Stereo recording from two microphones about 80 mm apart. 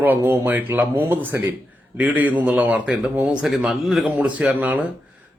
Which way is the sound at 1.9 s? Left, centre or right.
Centre.